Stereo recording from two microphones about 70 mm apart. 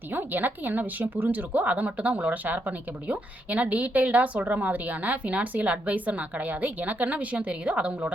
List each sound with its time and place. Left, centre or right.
0.1 s a woman's voice: right